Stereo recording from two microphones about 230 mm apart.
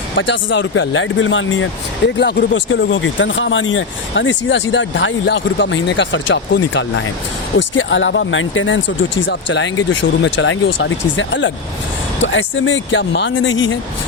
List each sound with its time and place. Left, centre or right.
0.2 s speech: left